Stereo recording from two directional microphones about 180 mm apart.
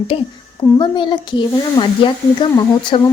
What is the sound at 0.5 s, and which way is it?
Speech, 25° left (ahead or behind).